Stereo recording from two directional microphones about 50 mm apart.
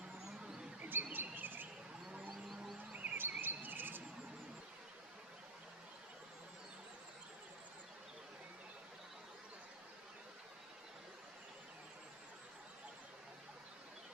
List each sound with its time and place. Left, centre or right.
0.8 s bird: right
2.3 s music: centre
2.9 s chirp: right